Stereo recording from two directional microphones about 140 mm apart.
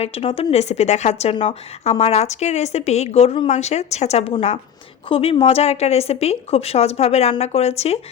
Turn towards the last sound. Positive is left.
turn(degrees=50)  # may be behind; listen again after turning